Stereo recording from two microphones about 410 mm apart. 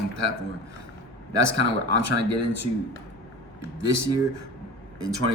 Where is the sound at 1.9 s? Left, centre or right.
Right.